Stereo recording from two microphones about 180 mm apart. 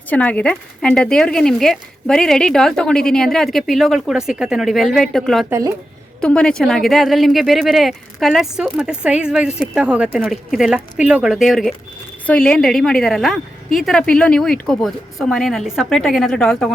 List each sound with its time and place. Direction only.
0.1 s speech: 10° left (ahead or behind)
5.5 s speech: 15° right (ahead or behind)
6.2 s speech: 5° left (ahead or behind)